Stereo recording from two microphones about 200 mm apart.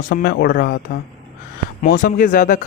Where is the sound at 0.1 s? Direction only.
55° left (ahead or behind).